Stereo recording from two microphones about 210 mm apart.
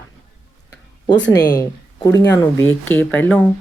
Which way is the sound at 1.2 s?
15° left (ahead or behind).